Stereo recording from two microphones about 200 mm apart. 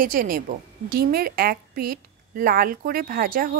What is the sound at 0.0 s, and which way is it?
A woman's voice, 45° right (ahead or behind).